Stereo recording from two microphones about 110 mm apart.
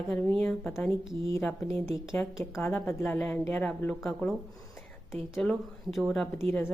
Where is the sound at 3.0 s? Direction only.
10° left (ahead or behind).